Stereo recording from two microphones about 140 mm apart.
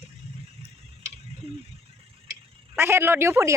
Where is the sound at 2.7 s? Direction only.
15° right (ahead or behind).